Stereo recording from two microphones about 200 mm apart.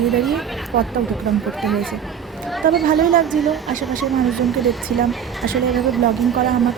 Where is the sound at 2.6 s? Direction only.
45° right (ahead or behind).